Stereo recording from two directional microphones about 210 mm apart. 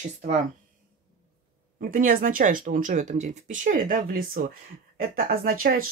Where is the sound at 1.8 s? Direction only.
40° right (ahead or behind).